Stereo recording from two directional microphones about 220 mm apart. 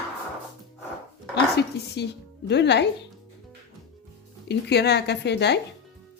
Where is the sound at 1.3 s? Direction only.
50° left (ahead or behind).